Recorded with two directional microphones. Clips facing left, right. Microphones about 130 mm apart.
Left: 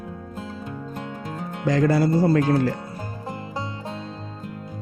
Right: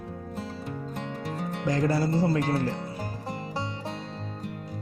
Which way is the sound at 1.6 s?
90° left.